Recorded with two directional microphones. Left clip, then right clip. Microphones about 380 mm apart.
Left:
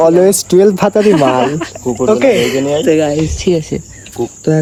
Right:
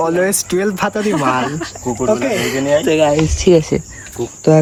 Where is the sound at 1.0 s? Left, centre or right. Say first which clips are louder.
Left 7 dB; centre.